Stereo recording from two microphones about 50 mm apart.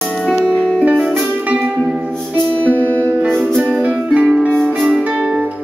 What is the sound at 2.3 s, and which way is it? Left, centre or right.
Music, left.